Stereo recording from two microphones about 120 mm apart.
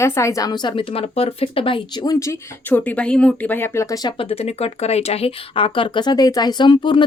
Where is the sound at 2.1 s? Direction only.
25° left (ahead or behind).